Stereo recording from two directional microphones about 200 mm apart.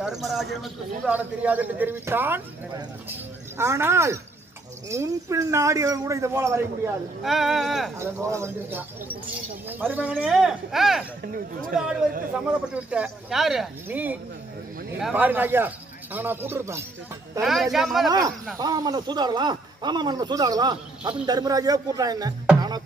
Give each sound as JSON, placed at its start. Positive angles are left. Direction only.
{"t": 0.0, "sound": "a man's voice", "side_deg": 0}
{"t": 7.2, "sound": "speech", "side_deg": 0}
{"t": 8.0, "sound": "a man's voice", "side_deg": -15}
{"t": 17.4, "sound": "speech", "side_deg": 0}
{"t": 18.6, "sound": "a man's voice", "side_deg": -20}